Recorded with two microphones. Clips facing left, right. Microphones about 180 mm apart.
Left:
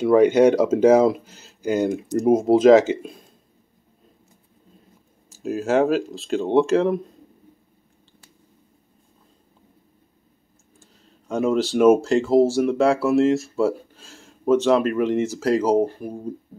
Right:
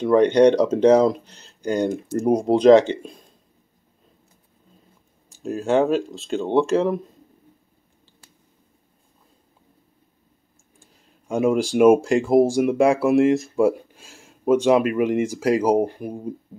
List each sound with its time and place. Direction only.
0.0 s speech: 5° left (ahead or behind)
5.3 s speech: centre (ahead or behind)
10.8 s speech: 10° right (ahead or behind)